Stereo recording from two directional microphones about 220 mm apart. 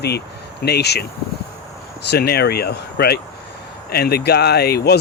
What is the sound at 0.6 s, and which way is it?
Speech, 50° left (ahead or behind).